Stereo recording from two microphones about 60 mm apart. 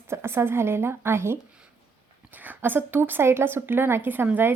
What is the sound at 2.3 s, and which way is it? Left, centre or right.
Speech, right.